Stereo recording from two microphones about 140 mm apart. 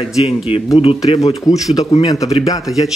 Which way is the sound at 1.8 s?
50° left (ahead or behind).